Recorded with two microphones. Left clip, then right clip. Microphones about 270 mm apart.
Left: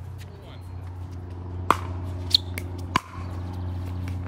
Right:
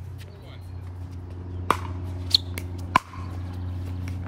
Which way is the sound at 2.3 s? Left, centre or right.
Centre.